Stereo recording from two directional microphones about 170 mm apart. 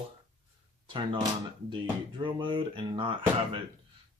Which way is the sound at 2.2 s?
30° right (ahead or behind).